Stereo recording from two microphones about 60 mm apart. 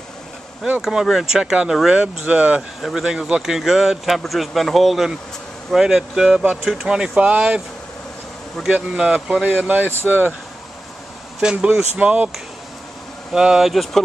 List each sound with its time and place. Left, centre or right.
0.8 s speech: centre
2.8 s speech: centre
7.2 s speech: right
8.6 s speech: centre; by 10.3 s right
11.3 s speech: centre
13.3 s speech: centre